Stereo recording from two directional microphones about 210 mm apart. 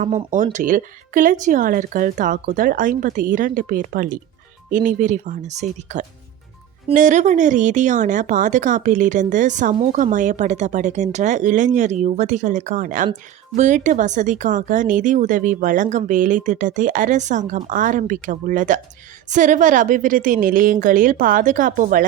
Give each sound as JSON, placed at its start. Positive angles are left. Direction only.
{"t": 0.5, "sound": "speech", "side_deg": -40}